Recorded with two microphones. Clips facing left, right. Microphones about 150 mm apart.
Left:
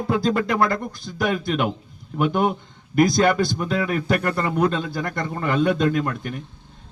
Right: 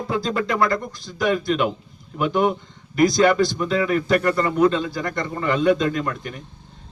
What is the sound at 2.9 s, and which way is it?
Speech, 55° left (ahead or behind).